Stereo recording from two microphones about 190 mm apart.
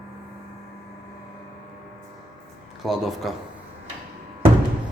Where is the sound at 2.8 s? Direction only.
Centre (ahead or behind).